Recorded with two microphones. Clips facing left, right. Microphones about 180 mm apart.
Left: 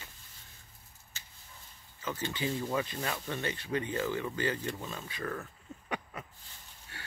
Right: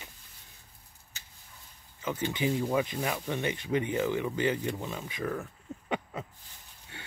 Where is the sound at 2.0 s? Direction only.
15° right (ahead or behind).